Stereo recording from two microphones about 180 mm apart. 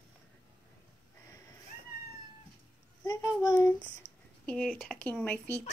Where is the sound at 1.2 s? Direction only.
20° left (ahead or behind).